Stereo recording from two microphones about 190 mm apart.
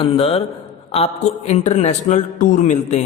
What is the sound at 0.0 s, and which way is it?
A man's voice, 30° left (ahead or behind).